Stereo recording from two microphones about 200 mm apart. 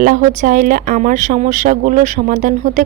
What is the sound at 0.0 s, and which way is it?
Speech, 40° right (ahead or behind).